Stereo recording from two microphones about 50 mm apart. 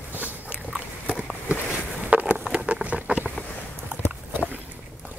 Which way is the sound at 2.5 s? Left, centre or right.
Right.